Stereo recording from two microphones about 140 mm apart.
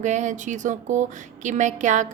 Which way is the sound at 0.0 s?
60° right (ahead or behind).